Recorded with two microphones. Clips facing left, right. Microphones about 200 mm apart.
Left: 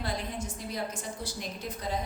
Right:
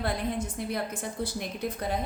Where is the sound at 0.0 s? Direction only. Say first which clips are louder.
Right 5 dB; 60° right (ahead or behind).